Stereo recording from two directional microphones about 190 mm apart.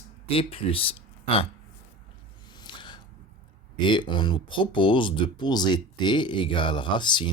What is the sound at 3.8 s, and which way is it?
Speech, 25° left (ahead or behind).